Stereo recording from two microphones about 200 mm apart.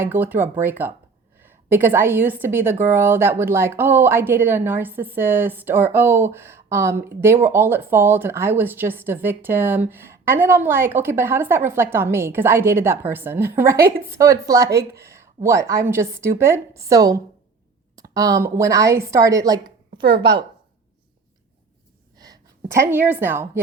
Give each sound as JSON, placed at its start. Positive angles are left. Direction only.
{"t": 0.0, "sound": "a woman's voice", "side_deg": -10}
{"t": 22.8, "sound": "a woman's voice", "side_deg": -10}